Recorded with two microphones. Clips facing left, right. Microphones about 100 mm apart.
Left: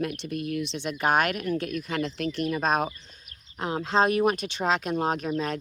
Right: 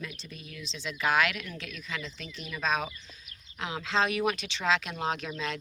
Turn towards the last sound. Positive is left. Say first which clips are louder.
# left 6 dB
turn(degrees=40)  # may be behind; listen again after turning